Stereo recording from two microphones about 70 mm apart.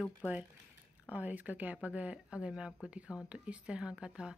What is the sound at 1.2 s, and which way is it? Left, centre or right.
A woman's voice, right.